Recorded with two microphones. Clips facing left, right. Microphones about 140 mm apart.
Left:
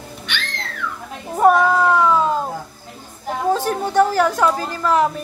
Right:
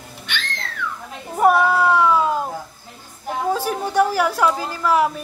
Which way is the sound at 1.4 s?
10° right (ahead or behind).